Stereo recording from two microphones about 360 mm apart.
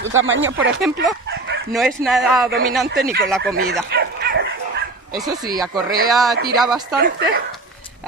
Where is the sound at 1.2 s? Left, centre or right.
Right.